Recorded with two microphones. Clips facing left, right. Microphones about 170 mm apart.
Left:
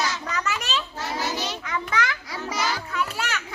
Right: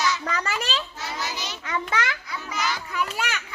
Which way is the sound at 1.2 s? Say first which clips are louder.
Left 5 dB; 50° left (ahead or behind).